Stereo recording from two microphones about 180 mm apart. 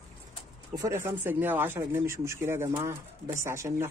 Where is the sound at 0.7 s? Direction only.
15° right (ahead or behind).